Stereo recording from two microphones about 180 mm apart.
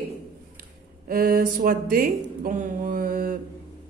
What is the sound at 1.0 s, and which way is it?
Speech, 55° right (ahead or behind).